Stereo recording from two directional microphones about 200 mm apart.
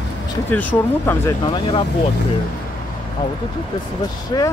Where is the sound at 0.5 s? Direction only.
10° left (ahead or behind).